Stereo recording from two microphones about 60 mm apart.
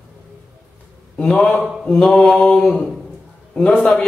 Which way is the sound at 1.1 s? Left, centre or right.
Centre.